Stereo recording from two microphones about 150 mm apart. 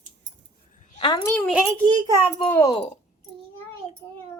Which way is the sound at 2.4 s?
15° left (ahead or behind).